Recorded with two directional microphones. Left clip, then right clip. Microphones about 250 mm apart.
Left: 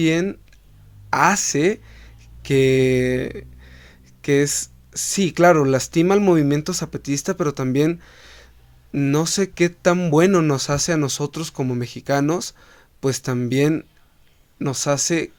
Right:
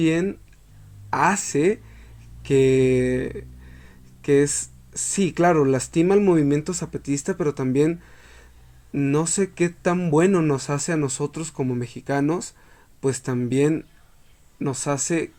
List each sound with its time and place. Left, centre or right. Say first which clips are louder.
0.0 s speech: left 2 dB; left